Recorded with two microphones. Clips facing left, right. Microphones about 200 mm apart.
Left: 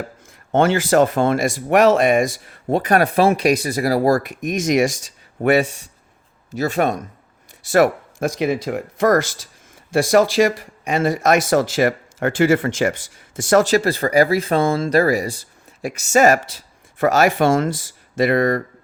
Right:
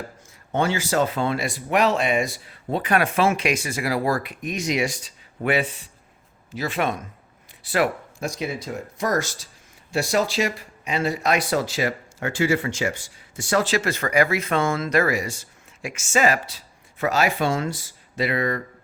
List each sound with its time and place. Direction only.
0.5 s speech: 50° left (ahead or behind)
8.4 s speech: 85° left
10.0 s speech: 50° left (ahead or behind)